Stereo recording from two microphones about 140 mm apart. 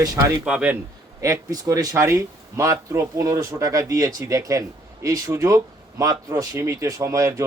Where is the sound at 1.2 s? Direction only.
25° right (ahead or behind).